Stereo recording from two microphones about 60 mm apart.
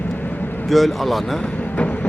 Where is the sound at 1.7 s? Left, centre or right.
Centre.